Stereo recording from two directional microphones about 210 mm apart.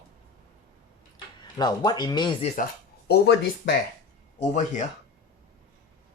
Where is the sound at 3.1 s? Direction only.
50° left (ahead or behind).